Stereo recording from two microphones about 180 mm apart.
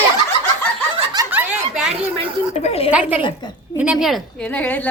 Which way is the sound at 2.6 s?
35° left (ahead or behind).